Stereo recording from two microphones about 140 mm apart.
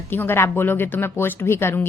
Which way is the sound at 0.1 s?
15° left (ahead or behind).